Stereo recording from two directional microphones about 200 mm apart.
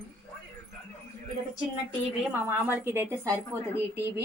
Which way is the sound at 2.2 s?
10° right (ahead or behind).